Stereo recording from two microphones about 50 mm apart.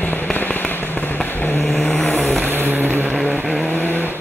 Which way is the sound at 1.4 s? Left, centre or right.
Left.